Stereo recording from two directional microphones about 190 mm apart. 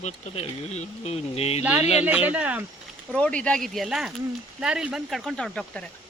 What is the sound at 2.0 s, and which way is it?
Speech, 10° right (ahead or behind).